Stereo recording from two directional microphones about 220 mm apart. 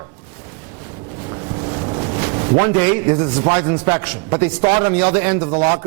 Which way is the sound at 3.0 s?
20° right (ahead or behind).